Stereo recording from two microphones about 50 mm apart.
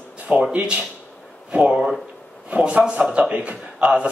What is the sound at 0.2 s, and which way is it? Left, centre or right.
A man's voice, right.